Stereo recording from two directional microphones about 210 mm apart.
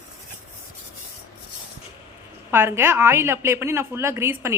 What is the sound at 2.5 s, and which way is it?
A woman's voice, 10° right (ahead or behind).